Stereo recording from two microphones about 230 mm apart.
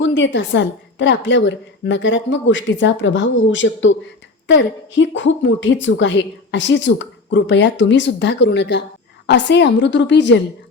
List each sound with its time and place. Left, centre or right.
0.0 s a woman's voice: left